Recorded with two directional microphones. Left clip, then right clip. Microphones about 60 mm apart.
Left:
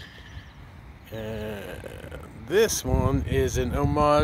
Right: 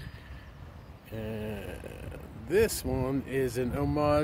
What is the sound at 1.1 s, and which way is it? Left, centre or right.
Mantra, right.